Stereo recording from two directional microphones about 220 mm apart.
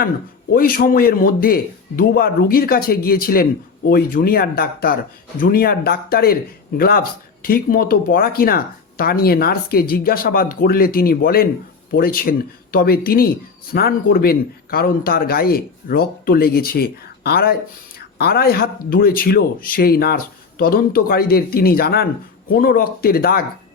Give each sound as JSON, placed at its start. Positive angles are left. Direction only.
{"t": 0.5, "sound": "a man's voice", "side_deg": 40}